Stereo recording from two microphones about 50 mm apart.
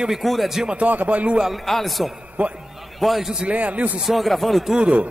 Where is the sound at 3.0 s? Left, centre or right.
Centre.